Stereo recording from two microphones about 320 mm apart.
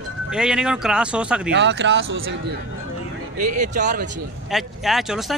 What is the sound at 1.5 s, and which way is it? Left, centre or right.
Speech, right.